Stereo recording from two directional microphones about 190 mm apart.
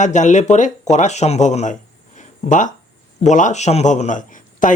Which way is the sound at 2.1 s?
40° left (ahead or behind).